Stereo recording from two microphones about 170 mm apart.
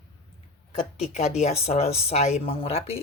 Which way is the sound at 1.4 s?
40° left (ahead or behind).